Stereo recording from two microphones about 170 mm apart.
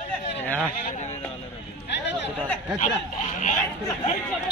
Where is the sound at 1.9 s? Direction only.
90° left.